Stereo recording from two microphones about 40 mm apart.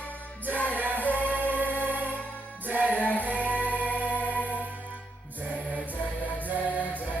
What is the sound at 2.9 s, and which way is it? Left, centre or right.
Music, left.